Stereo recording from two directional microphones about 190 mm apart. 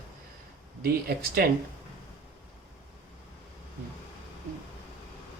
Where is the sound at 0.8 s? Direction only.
55° right (ahead or behind).